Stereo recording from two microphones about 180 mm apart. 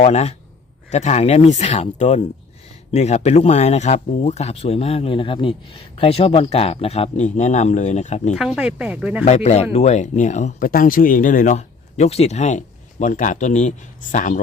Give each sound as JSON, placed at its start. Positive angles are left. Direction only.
{"t": 0.0, "sound": "speech", "side_deg": 35}
{"t": 8.4, "sound": "speech", "side_deg": -5}
{"t": 9.2, "sound": "speech", "side_deg": 40}